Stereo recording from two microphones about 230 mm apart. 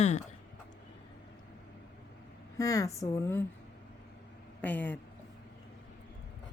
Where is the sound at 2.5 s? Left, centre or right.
Centre.